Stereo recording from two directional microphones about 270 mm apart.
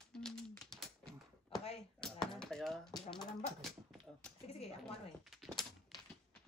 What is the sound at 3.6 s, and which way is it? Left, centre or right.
Dog, centre.